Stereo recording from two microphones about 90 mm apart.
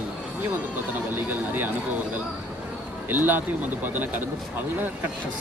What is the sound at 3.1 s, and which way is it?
Speech, 20° right (ahead or behind).